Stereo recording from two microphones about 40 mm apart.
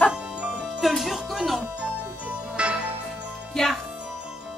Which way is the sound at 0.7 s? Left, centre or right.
Centre.